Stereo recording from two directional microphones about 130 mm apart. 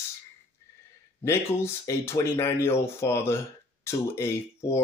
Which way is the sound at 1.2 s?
20° left (ahead or behind).